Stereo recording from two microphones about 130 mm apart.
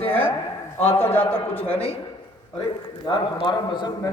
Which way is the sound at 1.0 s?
15° left (ahead or behind).